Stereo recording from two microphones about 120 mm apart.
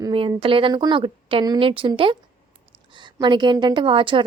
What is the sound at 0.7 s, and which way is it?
A woman's voice, 35° right (ahead or behind).